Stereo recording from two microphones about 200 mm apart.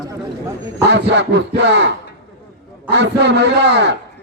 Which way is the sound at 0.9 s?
60° right (ahead or behind).